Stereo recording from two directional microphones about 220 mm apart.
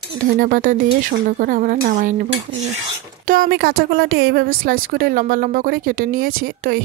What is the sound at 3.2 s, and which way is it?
Speech, 40° right (ahead or behind).